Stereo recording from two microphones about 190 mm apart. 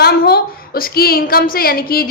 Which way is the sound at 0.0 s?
55° left (ahead or behind).